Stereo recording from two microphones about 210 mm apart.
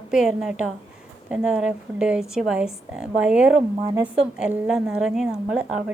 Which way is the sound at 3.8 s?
15° right (ahead or behind).